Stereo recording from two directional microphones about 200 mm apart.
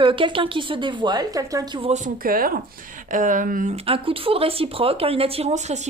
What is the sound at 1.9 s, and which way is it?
Speech, 40° right (ahead or behind).